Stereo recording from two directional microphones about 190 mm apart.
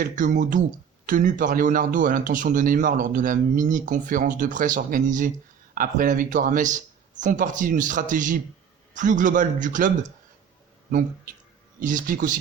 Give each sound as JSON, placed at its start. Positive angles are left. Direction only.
{"t": 0.0, "sound": "a man's voice", "side_deg": -45}
{"t": 11.8, "sound": "a man's voice", "side_deg": -45}